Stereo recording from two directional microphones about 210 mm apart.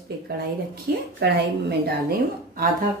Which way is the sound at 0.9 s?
45° right (ahead or behind).